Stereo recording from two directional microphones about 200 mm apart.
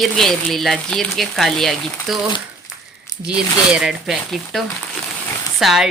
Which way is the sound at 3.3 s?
5° right (ahead or behind).